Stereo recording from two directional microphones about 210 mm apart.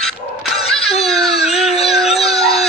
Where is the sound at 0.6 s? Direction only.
30° left (ahead or behind).